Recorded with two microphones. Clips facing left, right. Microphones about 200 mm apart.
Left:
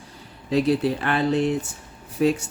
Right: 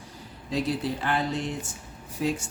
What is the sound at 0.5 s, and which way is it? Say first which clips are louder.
Speech: left 7 dB; 65° left (ahead or behind).